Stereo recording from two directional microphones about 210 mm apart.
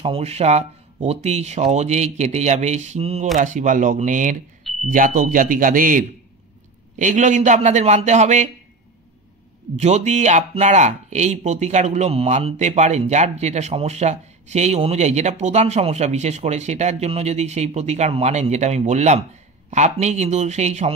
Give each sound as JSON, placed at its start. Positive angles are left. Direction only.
{"t": 0.0, "sound": "speech", "side_deg": -30}
{"t": 9.8, "sound": "speech", "side_deg": -30}